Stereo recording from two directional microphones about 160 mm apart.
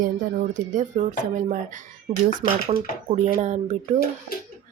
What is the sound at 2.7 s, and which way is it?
Speech, 40° right (ahead or behind).